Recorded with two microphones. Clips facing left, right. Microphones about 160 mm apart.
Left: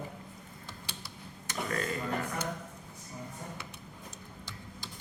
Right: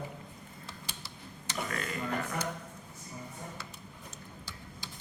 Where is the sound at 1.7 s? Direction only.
35° left (ahead or behind).